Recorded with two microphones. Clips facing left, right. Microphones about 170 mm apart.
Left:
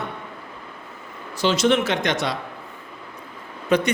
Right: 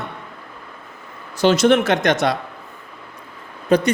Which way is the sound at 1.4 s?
50° right (ahead or behind).